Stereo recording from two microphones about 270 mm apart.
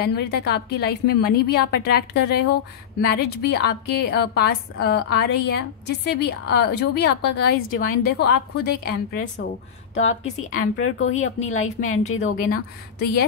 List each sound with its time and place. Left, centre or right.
0.0 s a woman's voice: left
10.8 s speech: left
11.6 s a woman's voice: left